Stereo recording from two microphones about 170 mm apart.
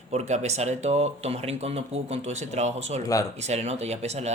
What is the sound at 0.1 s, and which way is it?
Speech, 40° right (ahead or behind).